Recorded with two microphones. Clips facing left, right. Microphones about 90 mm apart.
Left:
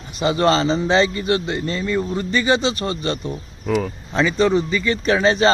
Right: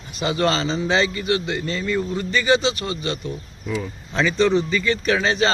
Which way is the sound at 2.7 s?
40° left (ahead or behind).